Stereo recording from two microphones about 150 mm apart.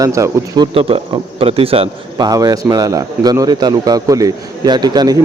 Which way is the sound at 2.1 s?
25° right (ahead or behind).